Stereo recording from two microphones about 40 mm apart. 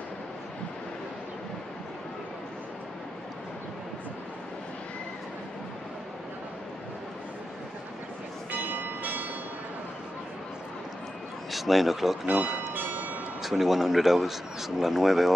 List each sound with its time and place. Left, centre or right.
8.5 s church bell: right
11.5 s a man's voice: centre
12.5 s bell: right
13.4 s speech: centre